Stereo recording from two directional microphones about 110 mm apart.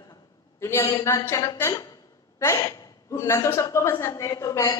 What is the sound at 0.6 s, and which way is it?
A woman's voice, 25° left (ahead or behind).